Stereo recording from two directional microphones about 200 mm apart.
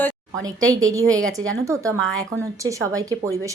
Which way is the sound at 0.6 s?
15° right (ahead or behind).